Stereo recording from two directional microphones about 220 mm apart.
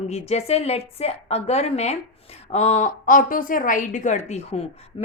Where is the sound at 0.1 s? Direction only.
30° left (ahead or behind).